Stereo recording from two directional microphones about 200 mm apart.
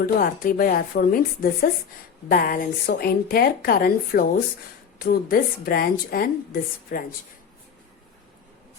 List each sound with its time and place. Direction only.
0.0 s a woman's voice: 45° left (ahead or behind)